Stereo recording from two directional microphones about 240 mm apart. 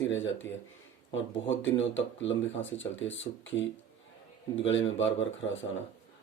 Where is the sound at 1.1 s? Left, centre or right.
Left.